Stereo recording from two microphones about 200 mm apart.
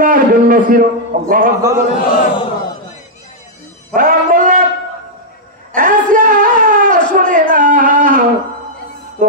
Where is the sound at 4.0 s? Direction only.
45° right (ahead or behind).